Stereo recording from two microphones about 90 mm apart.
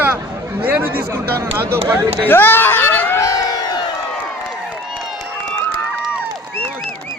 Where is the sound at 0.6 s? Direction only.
20° right (ahead or behind).